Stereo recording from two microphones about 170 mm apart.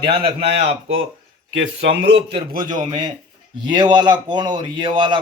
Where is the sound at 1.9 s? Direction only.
30° right (ahead or behind).